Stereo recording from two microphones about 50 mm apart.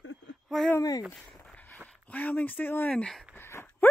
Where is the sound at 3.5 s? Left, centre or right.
Left.